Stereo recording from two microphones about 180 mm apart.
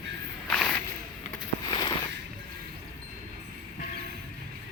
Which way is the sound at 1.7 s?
25° left (ahead or behind).